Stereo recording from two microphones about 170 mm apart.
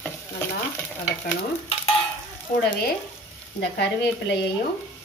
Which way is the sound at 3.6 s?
80° left.